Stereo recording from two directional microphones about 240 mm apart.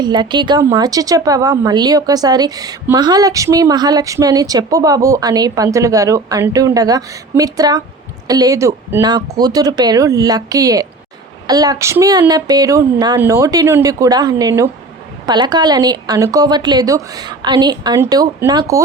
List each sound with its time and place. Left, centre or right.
0.0 s a woman's voice: centre